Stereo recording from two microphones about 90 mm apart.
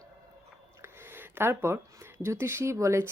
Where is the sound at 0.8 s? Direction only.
25° right (ahead or behind).